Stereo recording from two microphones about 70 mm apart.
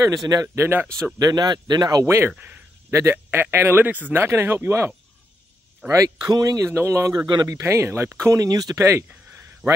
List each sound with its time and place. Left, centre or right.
0.0 s speech: right
0.6 s speech: right
1.1 s speech: right
2.0 s speech: right
2.3 s a man's voice: right
2.9 s speech: right
5.9 s speech: right
6.6 s speech: right
8.4 s speech: right
8.7 s speech: right